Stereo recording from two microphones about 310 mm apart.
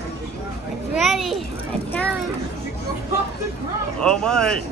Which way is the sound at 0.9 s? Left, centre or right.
Centre.